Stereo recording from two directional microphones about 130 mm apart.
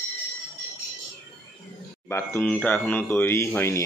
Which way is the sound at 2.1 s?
15° left (ahead or behind).